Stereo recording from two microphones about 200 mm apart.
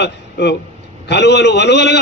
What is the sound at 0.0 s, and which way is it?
A man's voice, 60° left (ahead or behind).